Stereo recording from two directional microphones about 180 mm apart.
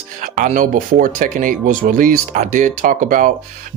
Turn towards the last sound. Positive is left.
turn(degrees=-50)  # may be behind; listen again after turning